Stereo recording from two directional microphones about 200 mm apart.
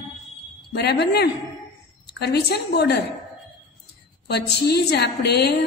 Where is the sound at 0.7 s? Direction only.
55° left (ahead or behind).